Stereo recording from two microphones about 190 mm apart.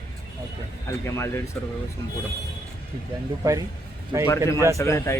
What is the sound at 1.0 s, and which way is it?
Speech, 15° left (ahead or behind).